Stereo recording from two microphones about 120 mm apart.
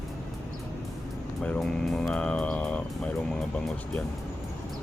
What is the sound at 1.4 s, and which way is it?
Speech, 5° left (ahead or behind).